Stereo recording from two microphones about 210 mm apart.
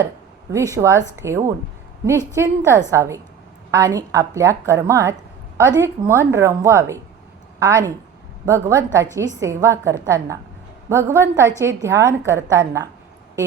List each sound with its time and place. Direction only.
0.5 s a woman's voice: 15° right (ahead or behind)